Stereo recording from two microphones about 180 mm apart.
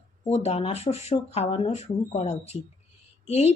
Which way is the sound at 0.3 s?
35° left (ahead or behind).